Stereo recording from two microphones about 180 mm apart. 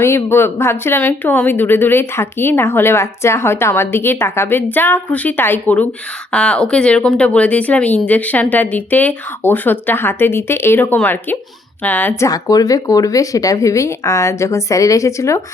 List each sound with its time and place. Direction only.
0.0 s a woman's voice: 15° left (ahead or behind)